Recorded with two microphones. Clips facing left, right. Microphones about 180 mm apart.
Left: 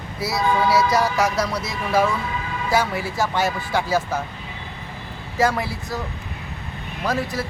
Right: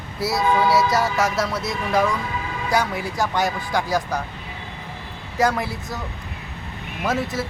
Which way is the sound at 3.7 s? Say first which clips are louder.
Left 1 dB; 15° right (ahead or behind).